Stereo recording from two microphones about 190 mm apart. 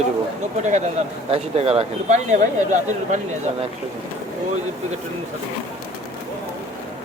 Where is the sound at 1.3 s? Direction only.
30° right (ahead or behind).